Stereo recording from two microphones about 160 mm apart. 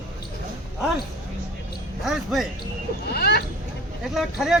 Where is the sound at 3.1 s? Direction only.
80° left.